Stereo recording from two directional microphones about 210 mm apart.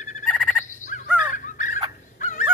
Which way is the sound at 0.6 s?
35° left (ahead or behind).